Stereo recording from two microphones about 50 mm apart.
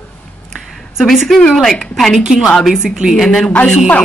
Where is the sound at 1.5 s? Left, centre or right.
Centre.